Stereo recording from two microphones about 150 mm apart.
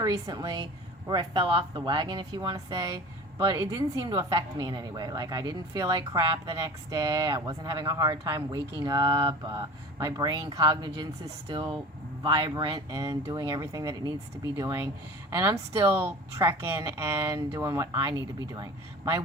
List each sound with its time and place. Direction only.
0.0 s a woman's voice: 25° right (ahead or behind)